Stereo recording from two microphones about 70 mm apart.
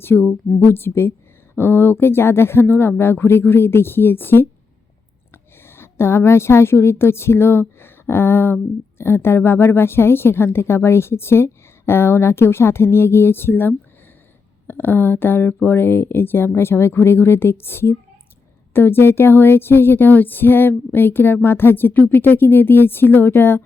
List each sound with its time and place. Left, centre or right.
0.0 s a woman's voice: left
5.6 s a woman's voice: left